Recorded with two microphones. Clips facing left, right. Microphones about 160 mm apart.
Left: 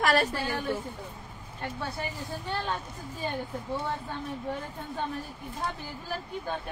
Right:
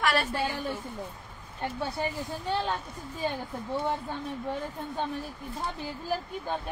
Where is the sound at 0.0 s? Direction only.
40° left (ahead or behind).